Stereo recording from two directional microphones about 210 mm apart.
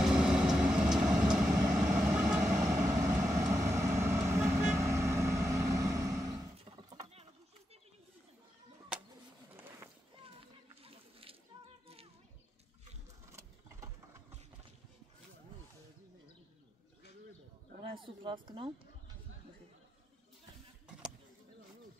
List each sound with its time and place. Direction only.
0.0 s vehicle: 5° right (ahead or behind)
3.0 s vehicle: 15° right (ahead or behind)
6.6 s horse: 25° right (ahead or behind)
10.8 s a sound: 25° right (ahead or behind)
13.3 s vehicle: 15° right (ahead or behind)
17.9 s speech: 25° right (ahead or behind)